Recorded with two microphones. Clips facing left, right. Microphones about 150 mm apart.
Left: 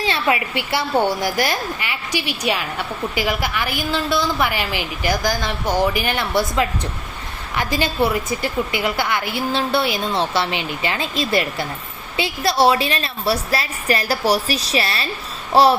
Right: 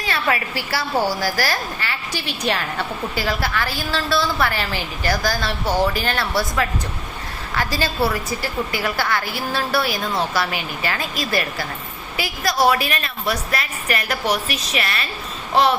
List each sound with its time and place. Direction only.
0.0 s a woman's voice: 20° left (ahead or behind)